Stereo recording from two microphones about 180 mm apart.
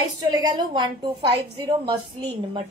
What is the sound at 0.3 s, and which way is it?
Speech, 25° right (ahead or behind).